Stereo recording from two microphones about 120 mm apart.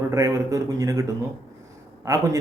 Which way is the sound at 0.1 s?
25° right (ahead or behind).